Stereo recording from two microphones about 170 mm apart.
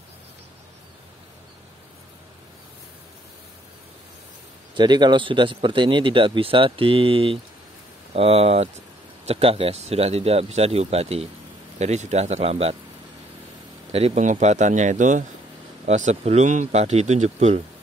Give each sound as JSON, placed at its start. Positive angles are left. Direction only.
{"t": 4.7, "sound": "speech", "side_deg": -25}
{"t": 13.9, "sound": "speech", "side_deg": -40}